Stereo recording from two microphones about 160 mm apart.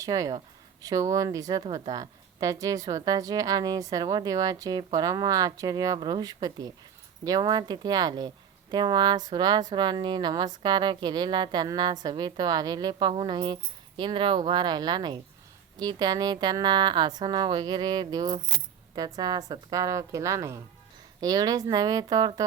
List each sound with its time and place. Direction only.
0.0 s speech: 20° right (ahead or behind)